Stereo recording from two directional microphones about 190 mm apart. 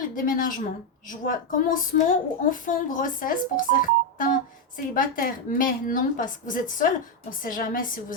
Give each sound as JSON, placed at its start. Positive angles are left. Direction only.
{"t": 0.0, "sound": "a woman's voice", "side_deg": 45}